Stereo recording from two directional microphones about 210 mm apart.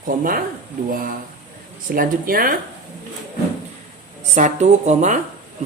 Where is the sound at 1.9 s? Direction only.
40° right (ahead or behind).